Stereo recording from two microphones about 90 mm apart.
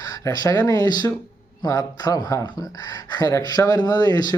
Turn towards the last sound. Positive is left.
turn(degrees=45)  # may be behind; listen again after turning